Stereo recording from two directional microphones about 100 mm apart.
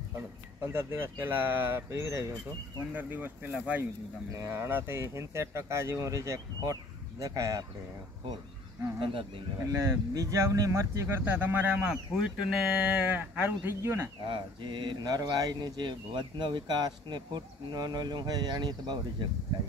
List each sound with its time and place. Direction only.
0.7 s speech: 25° right (ahead or behind)
2.9 s speech: 20° right (ahead or behind); by 7.6 s 35° right (ahead or behind)
9.7 s speech: 35° right (ahead or behind)
11.2 s speech: 15° right (ahead or behind)
14.2 s speech: 55° right (ahead or behind)
15.8 s speech: 50° right (ahead or behind)